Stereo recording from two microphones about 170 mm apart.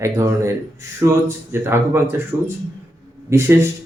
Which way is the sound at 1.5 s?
15° right (ahead or behind).